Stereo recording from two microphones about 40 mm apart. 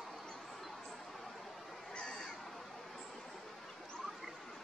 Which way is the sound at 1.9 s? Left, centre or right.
Left.